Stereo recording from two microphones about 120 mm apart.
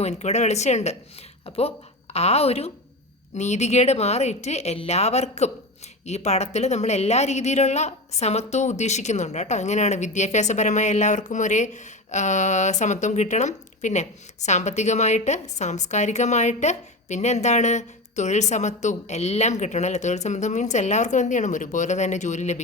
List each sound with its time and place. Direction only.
0.0 s a woman's voice: 65° left (ahead or behind)
1.5 s a woman's voice: 55° left (ahead or behind)
3.3 s a woman's voice: 70° left (ahead or behind)